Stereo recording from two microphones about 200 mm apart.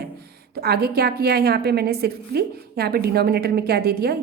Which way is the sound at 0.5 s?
50° right (ahead or behind).